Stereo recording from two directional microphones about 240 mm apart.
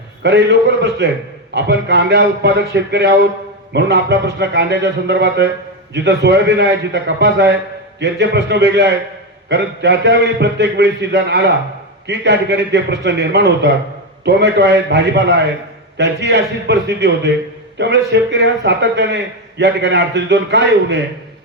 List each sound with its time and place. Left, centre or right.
0.2 s a man's voice: right